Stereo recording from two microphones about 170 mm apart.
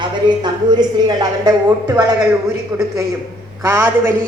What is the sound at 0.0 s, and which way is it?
A man's voice, 25° right (ahead or behind).